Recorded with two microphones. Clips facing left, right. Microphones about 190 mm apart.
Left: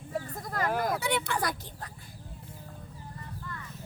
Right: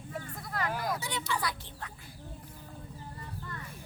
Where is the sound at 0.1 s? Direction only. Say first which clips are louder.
Left 5 dB; 40° left (ahead or behind).